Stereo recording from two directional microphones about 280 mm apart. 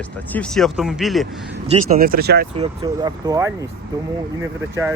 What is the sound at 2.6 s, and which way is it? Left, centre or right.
Speech, centre.